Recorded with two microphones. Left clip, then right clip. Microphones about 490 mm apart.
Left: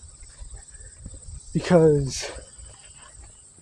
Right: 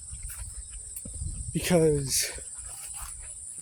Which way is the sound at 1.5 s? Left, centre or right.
Right.